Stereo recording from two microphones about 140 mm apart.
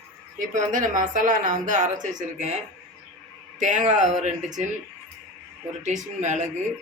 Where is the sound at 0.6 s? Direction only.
70° right (ahead or behind).